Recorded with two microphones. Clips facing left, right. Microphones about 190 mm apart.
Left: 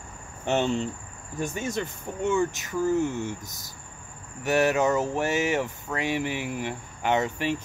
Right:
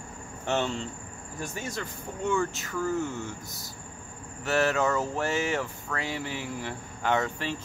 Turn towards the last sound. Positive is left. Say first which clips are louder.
# left 3 dB
turn(degrees=15)  # may be behind; listen again after turning